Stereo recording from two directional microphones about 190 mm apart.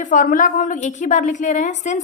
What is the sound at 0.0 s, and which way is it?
A woman's voice, 45° left (ahead or behind).